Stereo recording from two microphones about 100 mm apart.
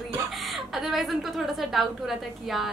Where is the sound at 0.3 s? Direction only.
Centre (ahead or behind).